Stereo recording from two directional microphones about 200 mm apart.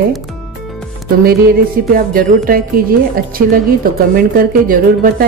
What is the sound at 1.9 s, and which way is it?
A woman's voice, 45° right (ahead or behind).